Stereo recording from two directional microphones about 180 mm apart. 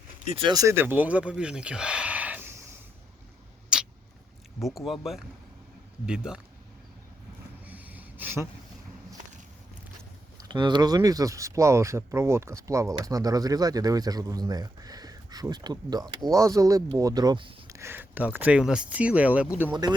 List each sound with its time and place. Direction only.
0.3 s speech: 25° right (ahead or behind); by 2.6 s 10° right (ahead or behind)
4.9 s speech: centre (ahead or behind)
7.7 s a sound: 10° right (ahead or behind)
10.3 s speech: 25° right (ahead or behind)
17.7 s speech: 10° right (ahead or behind)